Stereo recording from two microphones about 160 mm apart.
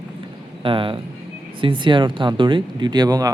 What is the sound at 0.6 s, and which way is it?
Speech, 30° right (ahead or behind).